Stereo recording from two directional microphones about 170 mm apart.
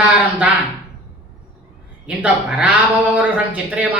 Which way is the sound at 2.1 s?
5° right (ahead or behind).